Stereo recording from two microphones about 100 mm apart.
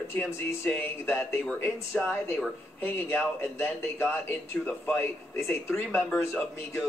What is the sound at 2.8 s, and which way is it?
Speech, 20° left (ahead or behind).